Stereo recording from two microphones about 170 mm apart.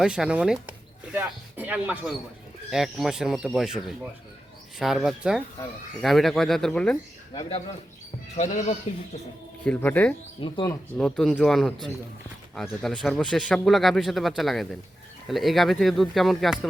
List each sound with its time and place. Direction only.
0.0 s speech: 5° right (ahead or behind)
8.4 s speech: 45° left (ahead or behind)
9.6 s speech: 10° left (ahead or behind)
10.4 s speech: 30° left (ahead or behind)
10.9 s speech: 5° left (ahead or behind)